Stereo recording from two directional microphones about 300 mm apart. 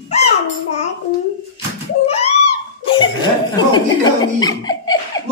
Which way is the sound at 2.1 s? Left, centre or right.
Centre.